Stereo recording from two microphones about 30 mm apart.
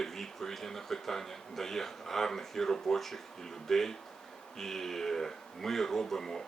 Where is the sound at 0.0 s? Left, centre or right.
Centre.